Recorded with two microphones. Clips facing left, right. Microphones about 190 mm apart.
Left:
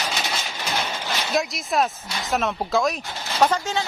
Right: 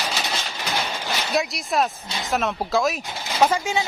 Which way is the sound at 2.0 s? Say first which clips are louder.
Even; 20° right (ahead or behind).